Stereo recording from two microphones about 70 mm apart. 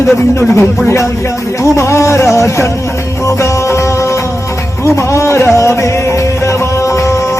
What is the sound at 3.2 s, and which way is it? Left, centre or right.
Music, left.